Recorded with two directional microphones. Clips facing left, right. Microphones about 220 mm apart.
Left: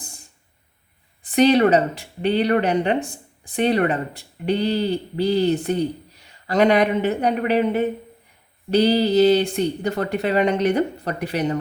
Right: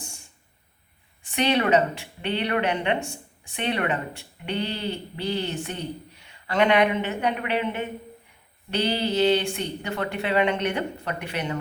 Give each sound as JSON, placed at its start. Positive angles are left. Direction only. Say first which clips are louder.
{"t": 1.2, "sound": "speech", "louder": "left 8 dB", "side_deg": 35}